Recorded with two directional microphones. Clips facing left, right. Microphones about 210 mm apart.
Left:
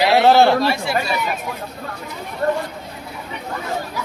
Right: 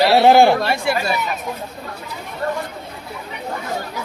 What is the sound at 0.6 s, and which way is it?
Speech, 55° right (ahead or behind).